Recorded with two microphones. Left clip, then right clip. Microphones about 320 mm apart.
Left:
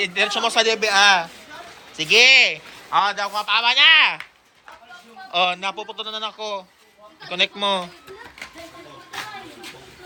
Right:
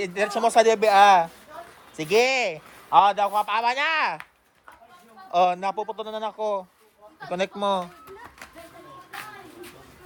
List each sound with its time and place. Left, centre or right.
0.0 s speech: centre
3.0 s a man's voice: centre
3.2 s speech: centre
5.3 s speech: centre